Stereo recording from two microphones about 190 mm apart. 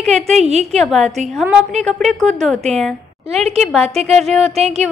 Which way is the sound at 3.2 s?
35° right (ahead or behind).